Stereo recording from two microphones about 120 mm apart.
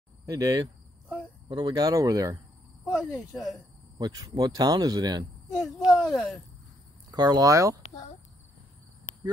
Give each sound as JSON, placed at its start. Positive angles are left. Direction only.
{"t": 0.3, "sound": "cricket", "side_deg": -30}
{"t": 1.5, "sound": "speech", "side_deg": -35}
{"t": 2.8, "sound": "speech", "side_deg": -5}
{"t": 4.0, "sound": "speech", "side_deg": -35}
{"t": 5.5, "sound": "speech", "side_deg": 0}
{"t": 7.1, "sound": "speech", "side_deg": -35}